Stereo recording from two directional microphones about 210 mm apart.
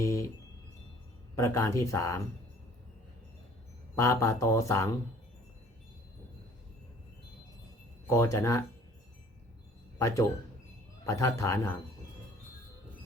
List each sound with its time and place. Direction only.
0.0 s a sound: 15° left (ahead or behind)
1.4 s speech: 15° left (ahead or behind)
3.9 s speech: 15° left (ahead or behind)
8.1 s speech: 15° left (ahead or behind)
10.0 s speech: 15° left (ahead or behind)